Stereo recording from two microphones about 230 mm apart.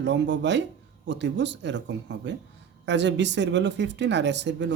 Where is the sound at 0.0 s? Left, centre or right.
Right.